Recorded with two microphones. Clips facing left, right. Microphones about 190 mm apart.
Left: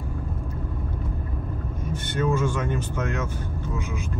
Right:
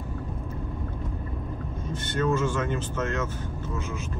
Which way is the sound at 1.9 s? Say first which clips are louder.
Left 1 dB; 10° left (ahead or behind).